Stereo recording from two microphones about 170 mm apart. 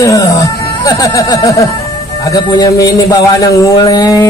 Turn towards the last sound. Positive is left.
turn(degrees=20)  # may be behind; listen again after turning